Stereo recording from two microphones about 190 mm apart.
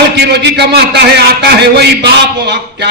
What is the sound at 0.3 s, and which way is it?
A man's voice, 60° right (ahead or behind).